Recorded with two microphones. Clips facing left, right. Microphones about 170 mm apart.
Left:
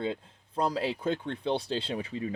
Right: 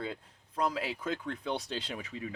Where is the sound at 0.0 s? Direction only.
30° left (ahead or behind).